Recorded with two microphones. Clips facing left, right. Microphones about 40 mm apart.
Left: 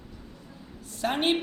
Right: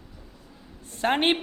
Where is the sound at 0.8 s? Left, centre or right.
Right.